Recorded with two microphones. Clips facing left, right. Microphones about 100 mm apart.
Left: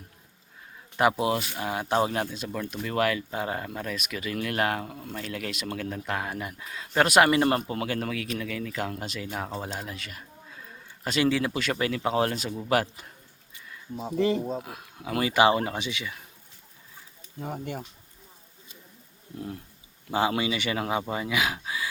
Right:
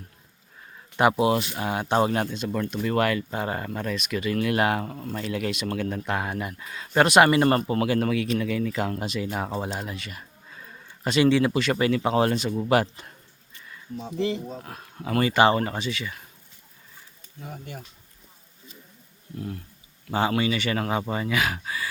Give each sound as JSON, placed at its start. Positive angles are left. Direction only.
{"t": 0.9, "sound": "speech", "side_deg": 0}
{"t": 13.9, "sound": "speech", "side_deg": 35}
{"t": 14.6, "sound": "speech", "side_deg": 5}
{"t": 17.4, "sound": "speech", "side_deg": 40}
{"t": 20.1, "sound": "speech", "side_deg": 10}